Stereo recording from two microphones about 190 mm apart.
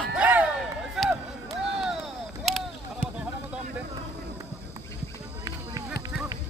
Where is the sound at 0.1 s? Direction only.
10° right (ahead or behind).